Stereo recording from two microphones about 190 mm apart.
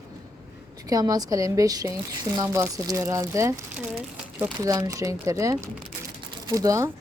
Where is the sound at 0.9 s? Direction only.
20° right (ahead or behind).